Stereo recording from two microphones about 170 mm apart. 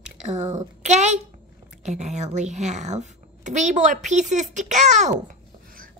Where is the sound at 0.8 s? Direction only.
45° right (ahead or behind).